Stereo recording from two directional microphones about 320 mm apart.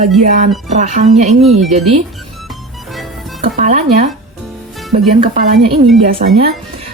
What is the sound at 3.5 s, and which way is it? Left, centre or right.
Speech, right.